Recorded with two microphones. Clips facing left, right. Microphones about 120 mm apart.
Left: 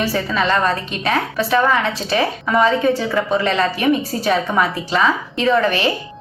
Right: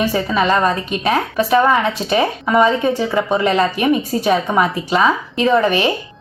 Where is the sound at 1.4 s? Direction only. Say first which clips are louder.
Right 3 dB; 20° right (ahead or behind).